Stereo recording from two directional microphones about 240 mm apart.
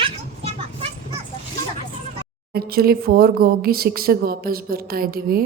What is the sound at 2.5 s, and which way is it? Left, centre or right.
Speech, right.